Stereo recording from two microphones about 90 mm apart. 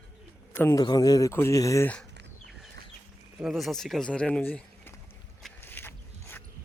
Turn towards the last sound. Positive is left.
turn(degrees=25)  # may be behind; listen again after turning